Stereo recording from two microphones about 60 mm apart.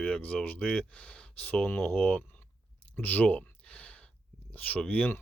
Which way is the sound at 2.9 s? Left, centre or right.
Left.